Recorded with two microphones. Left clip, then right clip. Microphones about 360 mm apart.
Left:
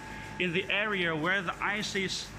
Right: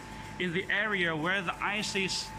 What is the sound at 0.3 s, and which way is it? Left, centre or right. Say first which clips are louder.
A man's voice: left 1 dB; centre.